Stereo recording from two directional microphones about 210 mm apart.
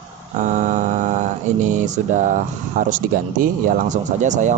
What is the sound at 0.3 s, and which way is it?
Speech, 35° right (ahead or behind).